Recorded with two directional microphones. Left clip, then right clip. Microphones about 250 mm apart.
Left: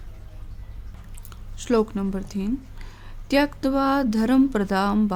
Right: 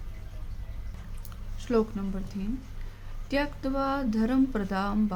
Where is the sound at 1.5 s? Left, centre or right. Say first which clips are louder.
Left 5 dB; left.